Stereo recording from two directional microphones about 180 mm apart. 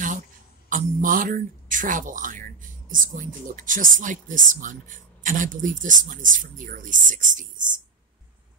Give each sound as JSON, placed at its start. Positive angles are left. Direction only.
{"t": 0.7, "sound": "speech", "side_deg": -50}